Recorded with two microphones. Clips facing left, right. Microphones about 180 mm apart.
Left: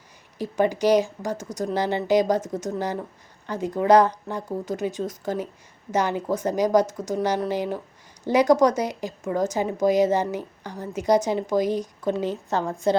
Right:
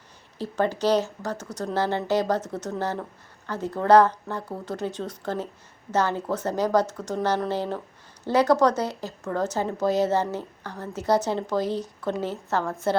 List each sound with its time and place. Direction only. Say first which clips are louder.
0.3 s speech: left 3 dB; 15° left (ahead or behind)